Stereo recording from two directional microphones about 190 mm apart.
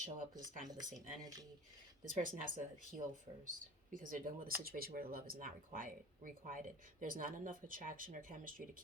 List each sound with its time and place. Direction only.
0.0 s speech: 45° right (ahead or behind)
1.2 s speech: 20° right (ahead or behind)
2.0 s speech: 45° right (ahead or behind)